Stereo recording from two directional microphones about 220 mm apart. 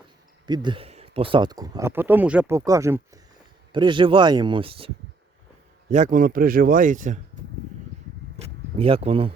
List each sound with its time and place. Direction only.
0.4 s speech: 20° right (ahead or behind)
5.9 s speech: 35° right (ahead or behind)
8.7 s speech: 25° right (ahead or behind)